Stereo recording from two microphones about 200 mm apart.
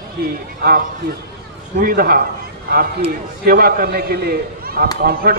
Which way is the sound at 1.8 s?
45° right (ahead or behind).